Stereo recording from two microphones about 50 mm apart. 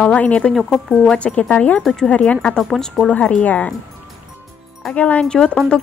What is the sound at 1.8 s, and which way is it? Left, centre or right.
Speech, centre.